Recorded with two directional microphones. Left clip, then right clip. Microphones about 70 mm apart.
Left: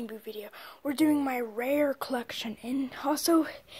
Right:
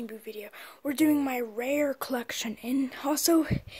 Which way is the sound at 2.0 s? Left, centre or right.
Right.